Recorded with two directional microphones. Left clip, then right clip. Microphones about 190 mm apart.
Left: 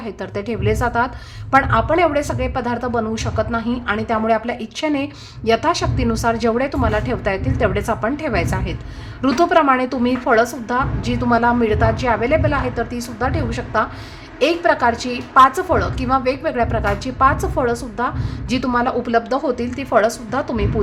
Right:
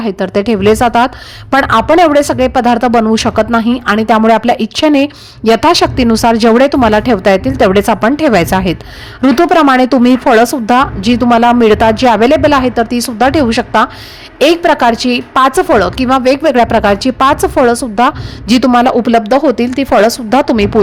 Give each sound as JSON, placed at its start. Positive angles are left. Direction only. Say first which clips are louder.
{"t": 0.0, "sound": "a woman's voice", "louder": "right 13 dB", "side_deg": -45}